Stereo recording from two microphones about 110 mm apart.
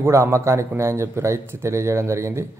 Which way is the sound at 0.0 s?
25° right (ahead or behind).